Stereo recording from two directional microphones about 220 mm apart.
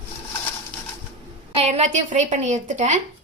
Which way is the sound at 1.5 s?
30° right (ahead or behind).